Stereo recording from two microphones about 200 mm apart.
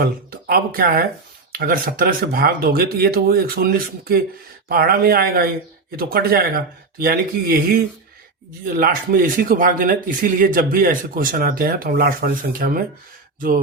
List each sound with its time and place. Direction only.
0.0 s speech: 50° right (ahead or behind)